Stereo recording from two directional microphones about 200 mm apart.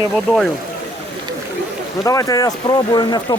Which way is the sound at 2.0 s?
15° left (ahead or behind).